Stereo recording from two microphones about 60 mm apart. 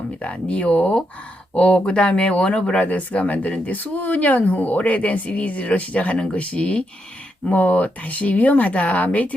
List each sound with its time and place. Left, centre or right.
0.2 s speech: centre